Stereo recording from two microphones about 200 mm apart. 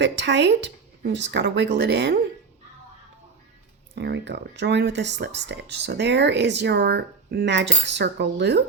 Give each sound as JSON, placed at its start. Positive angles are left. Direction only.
{"t": 0.0, "sound": "speech", "side_deg": -60}
{"t": 3.9, "sound": "speech", "side_deg": -60}